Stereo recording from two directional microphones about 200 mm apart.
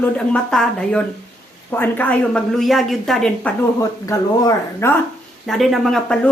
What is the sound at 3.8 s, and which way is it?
Speech, 15° left (ahead or behind).